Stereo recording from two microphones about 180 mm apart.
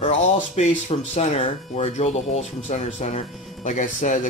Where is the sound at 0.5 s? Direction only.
40° left (ahead or behind).